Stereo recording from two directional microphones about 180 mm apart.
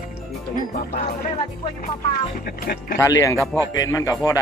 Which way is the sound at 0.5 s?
45° left (ahead or behind).